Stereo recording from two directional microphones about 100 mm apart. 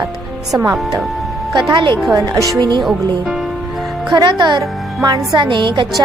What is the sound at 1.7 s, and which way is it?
Speech, 50° right (ahead or behind).